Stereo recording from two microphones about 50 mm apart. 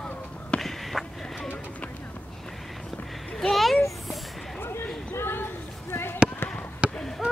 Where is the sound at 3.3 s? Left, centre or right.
Centre.